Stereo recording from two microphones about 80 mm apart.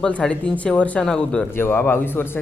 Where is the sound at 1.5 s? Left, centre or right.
Left.